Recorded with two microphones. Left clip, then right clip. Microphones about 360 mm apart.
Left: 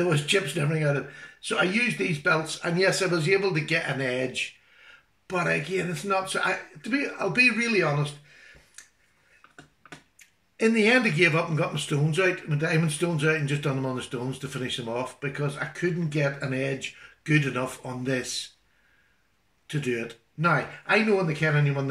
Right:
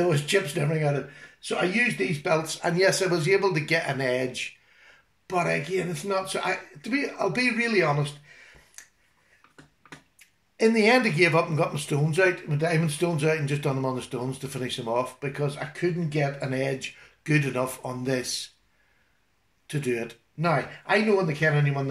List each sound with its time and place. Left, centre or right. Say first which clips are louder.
0.1 s speech: even; centre
10.1 s speech: right 5 dB; centre
19.7 s speech: right 1 dB; centre